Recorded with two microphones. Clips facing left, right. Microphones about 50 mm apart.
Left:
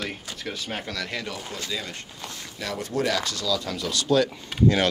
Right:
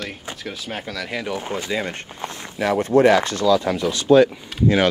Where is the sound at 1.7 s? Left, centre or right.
Right.